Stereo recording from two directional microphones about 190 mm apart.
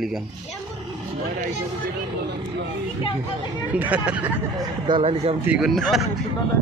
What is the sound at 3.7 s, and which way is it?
Speech, 10° right (ahead or behind).